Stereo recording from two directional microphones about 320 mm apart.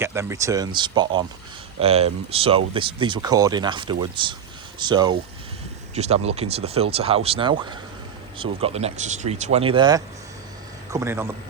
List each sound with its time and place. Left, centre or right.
0.0 s speech: centre